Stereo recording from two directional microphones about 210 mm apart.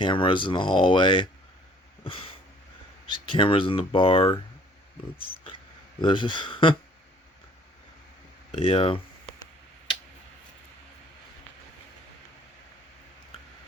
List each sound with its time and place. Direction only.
0.0 s speech: 25° left (ahead or behind)
3.1 s speech: 25° left (ahead or behind)
6.0 s speech: 25° left (ahead or behind)
8.5 s speech: 25° left (ahead or behind)